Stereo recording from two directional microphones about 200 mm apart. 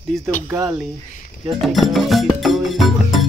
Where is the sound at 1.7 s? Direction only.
Centre (ahead or behind).